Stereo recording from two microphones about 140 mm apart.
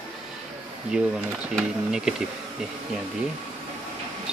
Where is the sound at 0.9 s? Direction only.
5° right (ahead or behind).